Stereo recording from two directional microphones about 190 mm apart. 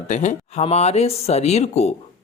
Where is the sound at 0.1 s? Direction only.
40° left (ahead or behind).